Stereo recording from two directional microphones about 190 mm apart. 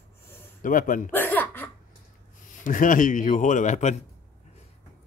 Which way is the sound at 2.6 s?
45° left (ahead or behind).